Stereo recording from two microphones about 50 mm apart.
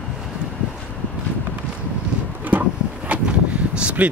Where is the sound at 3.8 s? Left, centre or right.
Right.